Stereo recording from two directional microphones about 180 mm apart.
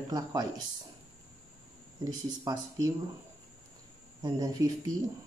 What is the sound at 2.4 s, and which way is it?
Speech, 20° right (ahead or behind).